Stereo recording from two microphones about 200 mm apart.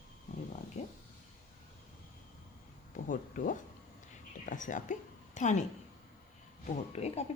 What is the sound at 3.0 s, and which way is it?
A woman's voice, 40° left (ahead or behind).